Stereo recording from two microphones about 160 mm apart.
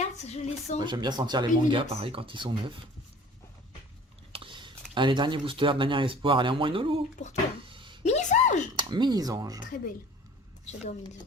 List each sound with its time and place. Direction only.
0.2 s speech: 45° left (ahead or behind)
0.9 s speech: 25° right (ahead or behind)
4.3 s speech: 35° right (ahead or behind)
7.2 s speech: 45° left (ahead or behind)
7.6 s a sound: 30° right (ahead or behind)
8.0 s a sound: 45° left (ahead or behind)
8.7 s speech: 30° right (ahead or behind)
9.6 s speech: 55° left (ahead or behind)